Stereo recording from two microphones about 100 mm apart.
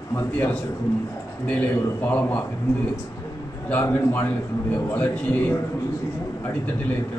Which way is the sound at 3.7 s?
20° left (ahead or behind).